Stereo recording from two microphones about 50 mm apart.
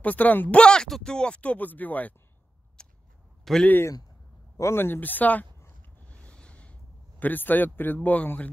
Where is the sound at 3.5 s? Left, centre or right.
Centre.